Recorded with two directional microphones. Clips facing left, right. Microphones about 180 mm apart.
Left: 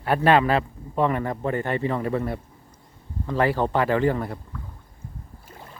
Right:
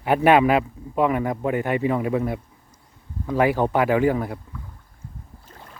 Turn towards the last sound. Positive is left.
turn(degrees=-5)  # may be behind; listen again after turning